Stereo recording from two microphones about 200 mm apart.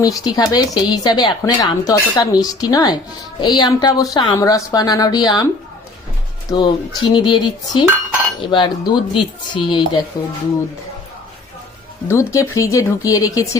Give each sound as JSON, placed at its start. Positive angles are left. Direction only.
{"t": 0.0, "sound": "speech", "side_deg": 15}
{"t": 6.5, "sound": "speech", "side_deg": 20}
{"t": 12.0, "sound": "speech", "side_deg": 15}